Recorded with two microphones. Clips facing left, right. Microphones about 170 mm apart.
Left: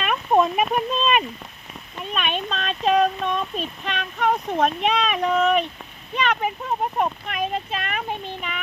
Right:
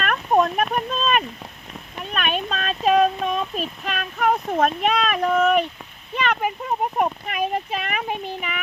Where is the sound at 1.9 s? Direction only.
Centre (ahead or behind).